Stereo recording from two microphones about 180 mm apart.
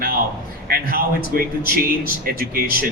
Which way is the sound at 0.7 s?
55° right (ahead or behind).